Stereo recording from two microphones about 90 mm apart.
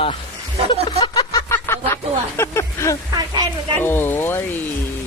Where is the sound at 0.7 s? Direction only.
70° left (ahead or behind).